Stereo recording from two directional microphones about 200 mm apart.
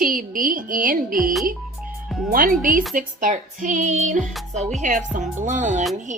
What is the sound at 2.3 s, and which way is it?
Music, 45° right (ahead or behind).